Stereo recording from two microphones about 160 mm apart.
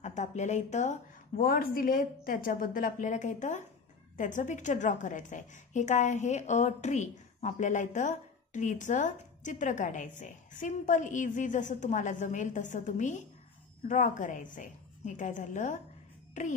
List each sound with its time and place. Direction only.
0.0 s a woman's voice: 45° left (ahead or behind)